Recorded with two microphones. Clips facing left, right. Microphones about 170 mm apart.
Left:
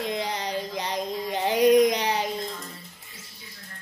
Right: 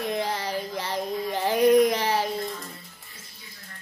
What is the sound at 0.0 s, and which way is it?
Child singing, 20° left (ahead or behind).